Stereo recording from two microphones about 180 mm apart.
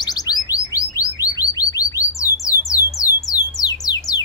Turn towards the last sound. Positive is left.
turn(degrees=20)  # may be behind; listen again after turning